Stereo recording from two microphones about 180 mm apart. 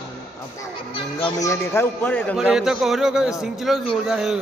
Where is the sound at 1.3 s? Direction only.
15° left (ahead or behind).